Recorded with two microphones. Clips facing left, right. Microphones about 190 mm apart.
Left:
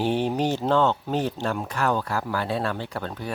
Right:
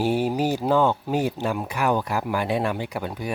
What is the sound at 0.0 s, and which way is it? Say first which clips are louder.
Speech: right 1 dB; 10° right (ahead or behind).